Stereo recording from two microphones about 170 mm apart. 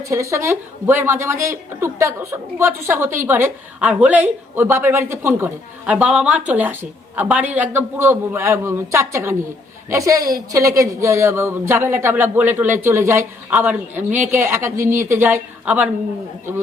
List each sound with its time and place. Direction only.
0.0 s a woman's voice: 15° right (ahead or behind)